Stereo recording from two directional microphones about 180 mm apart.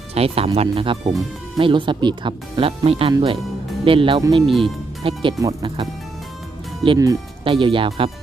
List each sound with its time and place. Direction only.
0.1 s speech: 35° right (ahead or behind)
6.8 s speech: 25° right (ahead or behind)